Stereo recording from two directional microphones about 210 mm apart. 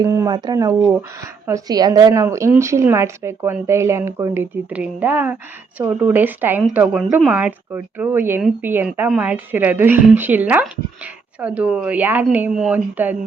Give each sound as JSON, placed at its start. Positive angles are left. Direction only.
{"t": 0.0, "sound": "speech", "side_deg": -15}